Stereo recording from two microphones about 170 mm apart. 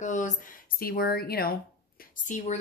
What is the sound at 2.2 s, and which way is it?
Speech, 45° left (ahead or behind).